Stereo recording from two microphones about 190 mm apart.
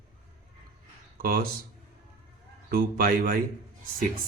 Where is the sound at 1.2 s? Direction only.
50° right (ahead or behind).